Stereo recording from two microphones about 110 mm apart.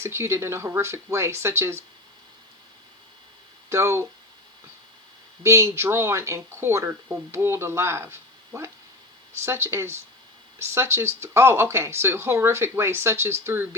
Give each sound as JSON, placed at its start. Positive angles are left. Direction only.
{"t": 0.0, "sound": "speech", "side_deg": -25}
{"t": 3.7, "sound": "speech", "side_deg": -25}
{"t": 5.4, "sound": "speech", "side_deg": -25}